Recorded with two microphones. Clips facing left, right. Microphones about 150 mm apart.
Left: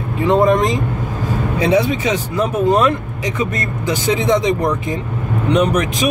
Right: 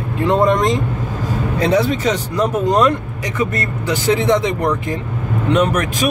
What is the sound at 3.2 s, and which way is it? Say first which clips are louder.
Speech: even; 20° left (ahead or behind).